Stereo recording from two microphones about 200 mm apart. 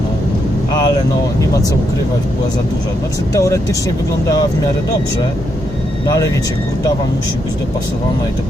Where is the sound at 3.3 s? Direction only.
15° left (ahead or behind).